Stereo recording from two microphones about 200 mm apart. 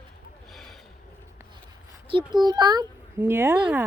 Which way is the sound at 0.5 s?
Centre (ahead or behind).